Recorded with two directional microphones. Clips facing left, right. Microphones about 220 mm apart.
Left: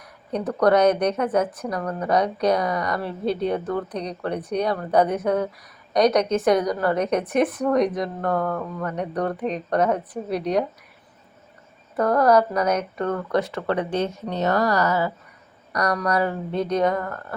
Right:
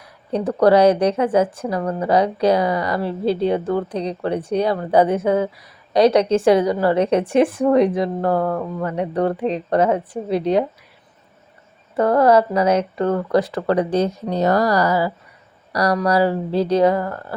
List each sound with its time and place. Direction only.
0.0 s a woman's voice: 30° right (ahead or behind)
11.9 s speech: 25° right (ahead or behind)